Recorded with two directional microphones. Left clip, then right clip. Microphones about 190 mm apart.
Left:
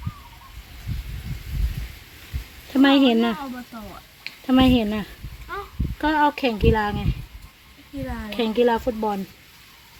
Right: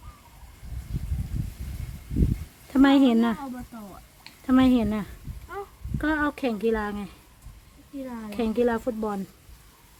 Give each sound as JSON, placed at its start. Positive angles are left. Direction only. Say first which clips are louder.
{"t": 2.7, "sound": "speech", "louder": "left 3 dB", "side_deg": -5}